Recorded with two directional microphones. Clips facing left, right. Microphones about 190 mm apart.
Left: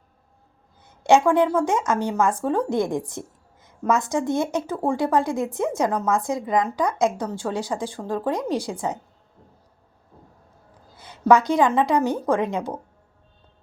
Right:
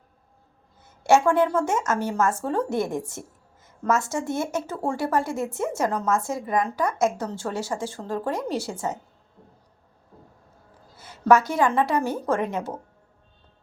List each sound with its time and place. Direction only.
1.0 s a woman's voice: 15° left (ahead or behind)
10.9 s a woman's voice: 15° left (ahead or behind)